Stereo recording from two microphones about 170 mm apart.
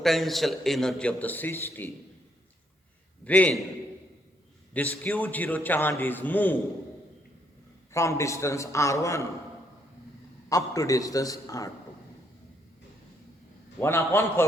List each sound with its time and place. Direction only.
0.0 s a man's voice: centre (ahead or behind)
3.2 s a man's voice: 10° left (ahead or behind)
4.7 s a man's voice: 10° left (ahead or behind)
7.9 s a man's voice: 15° left (ahead or behind)
10.5 s a man's voice: 20° left (ahead or behind)
13.7 s a man's voice: 15° left (ahead or behind)